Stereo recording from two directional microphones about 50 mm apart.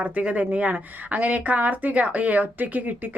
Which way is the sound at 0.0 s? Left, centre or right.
Right.